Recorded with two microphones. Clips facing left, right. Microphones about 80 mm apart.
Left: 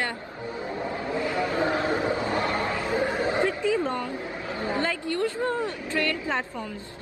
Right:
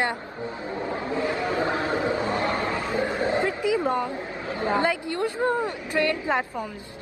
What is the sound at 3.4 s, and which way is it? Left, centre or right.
A woman's voice, centre.